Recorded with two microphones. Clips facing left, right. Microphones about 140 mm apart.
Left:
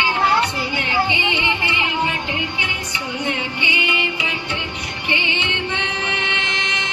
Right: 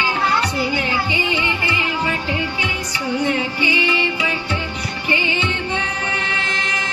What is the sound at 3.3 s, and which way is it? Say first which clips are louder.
Music: right 4 dB; 35° right (ahead or behind).